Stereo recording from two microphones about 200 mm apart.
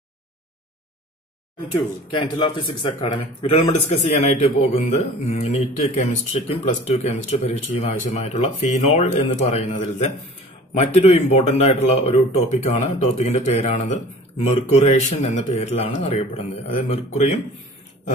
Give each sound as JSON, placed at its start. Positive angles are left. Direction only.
{"t": 2.0, "sound": "speech", "side_deg": 25}